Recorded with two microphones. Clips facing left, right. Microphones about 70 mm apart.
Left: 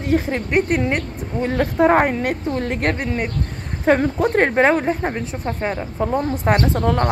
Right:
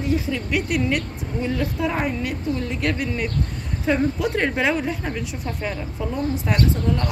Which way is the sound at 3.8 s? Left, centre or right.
Left.